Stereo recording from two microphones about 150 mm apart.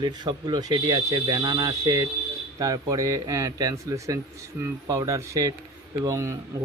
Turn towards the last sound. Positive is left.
turn(degrees=-20)  # may be behind; listen again after turning